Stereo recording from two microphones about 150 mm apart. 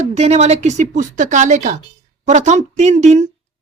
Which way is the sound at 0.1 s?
45° right (ahead or behind).